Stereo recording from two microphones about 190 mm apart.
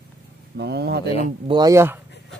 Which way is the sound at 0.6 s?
60° right (ahead or behind).